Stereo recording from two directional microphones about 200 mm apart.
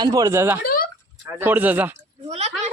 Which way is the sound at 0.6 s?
45° left (ahead or behind).